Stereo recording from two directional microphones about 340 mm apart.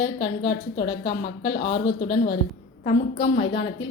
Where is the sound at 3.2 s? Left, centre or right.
Left.